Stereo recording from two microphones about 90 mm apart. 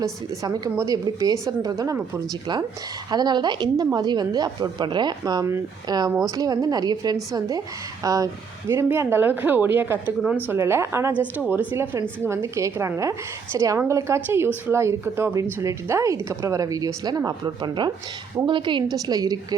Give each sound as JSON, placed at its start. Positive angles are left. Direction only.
{"t": 0.0, "sound": "a woman's voice", "side_deg": -45}
{"t": 1.7, "sound": "a woman's voice", "side_deg": -35}
{"t": 3.1, "sound": "a woman's voice", "side_deg": -50}
{"t": 11.1, "sound": "a woman's voice", "side_deg": -20}
{"t": 18.4, "sound": "a woman's voice", "side_deg": -65}
{"t": 18.9, "sound": "a woman's voice", "side_deg": -45}